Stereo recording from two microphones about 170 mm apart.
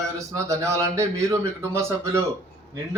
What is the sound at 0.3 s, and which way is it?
Speech, 20° right (ahead or behind).